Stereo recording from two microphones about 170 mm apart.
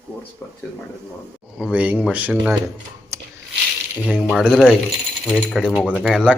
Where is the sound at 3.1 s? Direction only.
15° right (ahead or behind).